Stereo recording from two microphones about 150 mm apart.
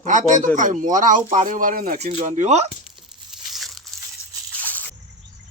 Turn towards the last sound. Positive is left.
turn(degrees=10)  # may be behind; listen again after turning